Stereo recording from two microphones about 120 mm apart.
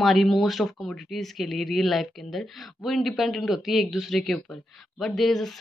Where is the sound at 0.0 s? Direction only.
Centre (ahead or behind).